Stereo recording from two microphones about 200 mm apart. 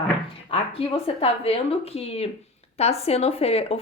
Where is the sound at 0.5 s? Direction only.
30° left (ahead or behind).